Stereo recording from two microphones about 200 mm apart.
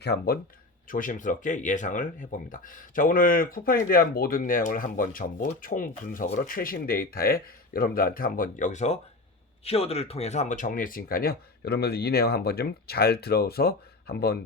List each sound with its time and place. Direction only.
0.0 s speech: 55° left (ahead or behind)
0.9 s speech: 40° left (ahead or behind)